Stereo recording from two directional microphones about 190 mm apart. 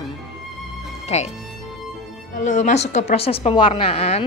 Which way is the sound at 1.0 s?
35° left (ahead or behind).